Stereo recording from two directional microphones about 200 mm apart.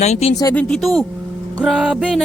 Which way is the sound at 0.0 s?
30° left (ahead or behind).